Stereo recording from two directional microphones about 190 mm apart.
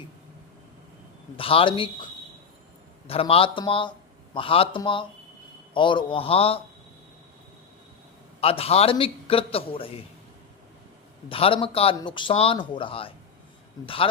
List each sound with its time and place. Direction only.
1.4 s speech: 30° left (ahead or behind)
3.1 s speech: 30° left (ahead or behind)
8.4 s a man's voice: 30° left (ahead or behind)
11.3 s speech: 30° left (ahead or behind)